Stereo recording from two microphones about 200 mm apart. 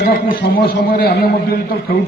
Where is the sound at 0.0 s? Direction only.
45° left (ahead or behind).